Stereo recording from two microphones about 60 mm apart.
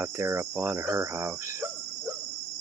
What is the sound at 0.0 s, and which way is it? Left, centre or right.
Cricket, right.